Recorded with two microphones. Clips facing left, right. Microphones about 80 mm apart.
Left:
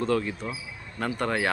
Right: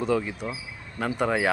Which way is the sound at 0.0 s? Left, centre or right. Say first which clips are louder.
Right 1 dB; centre.